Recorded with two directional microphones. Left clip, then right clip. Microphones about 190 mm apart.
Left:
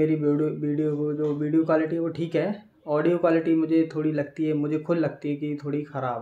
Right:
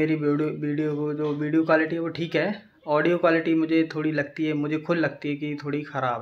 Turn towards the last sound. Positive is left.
turn(degrees=10)  # may be behind; listen again after turning